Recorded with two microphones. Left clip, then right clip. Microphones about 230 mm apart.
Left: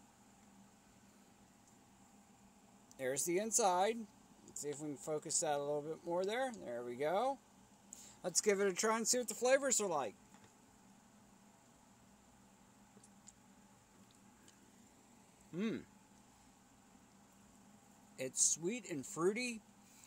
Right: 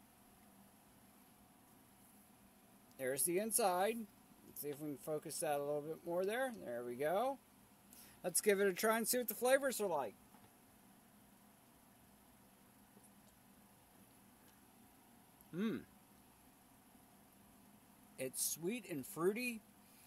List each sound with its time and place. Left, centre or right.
3.0 s speech: centre
8.4 s speech: centre
9.7 s speech: centre
15.5 s a sound: centre
18.1 s speech: centre